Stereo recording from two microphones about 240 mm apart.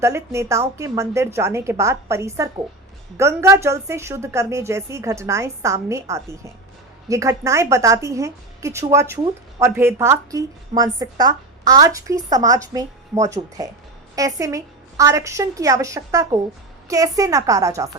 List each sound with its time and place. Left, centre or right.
0.0 s a woman's voice: centre